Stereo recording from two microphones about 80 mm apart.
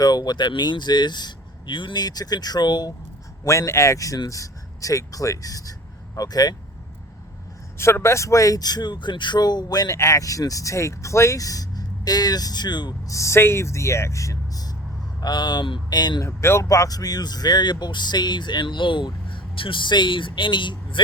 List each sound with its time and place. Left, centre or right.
0.0 s speech: left
3.4 s speech: left
7.8 s speech: left
10.0 s speech: left
13.1 s speech: left
15.2 s speech: left
16.2 s speech: left